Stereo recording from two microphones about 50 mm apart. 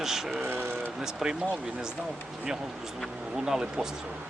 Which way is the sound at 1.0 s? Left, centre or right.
Centre.